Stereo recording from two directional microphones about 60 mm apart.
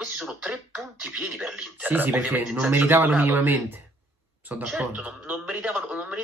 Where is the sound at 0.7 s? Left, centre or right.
Right.